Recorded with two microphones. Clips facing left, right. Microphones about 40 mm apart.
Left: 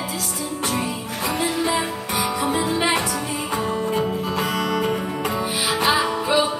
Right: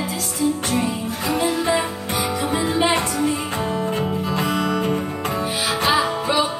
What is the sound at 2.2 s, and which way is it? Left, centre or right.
Music, left.